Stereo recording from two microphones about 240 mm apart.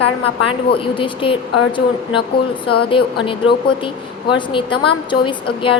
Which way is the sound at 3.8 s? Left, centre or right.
Left.